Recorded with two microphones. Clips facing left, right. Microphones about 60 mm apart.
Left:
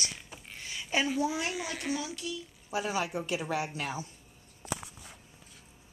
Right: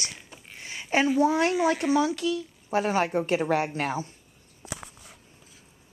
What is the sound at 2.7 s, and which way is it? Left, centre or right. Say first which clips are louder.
Speech: right 7 dB; right.